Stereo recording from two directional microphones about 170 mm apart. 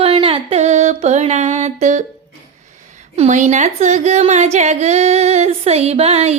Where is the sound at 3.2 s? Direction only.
45° right (ahead or behind).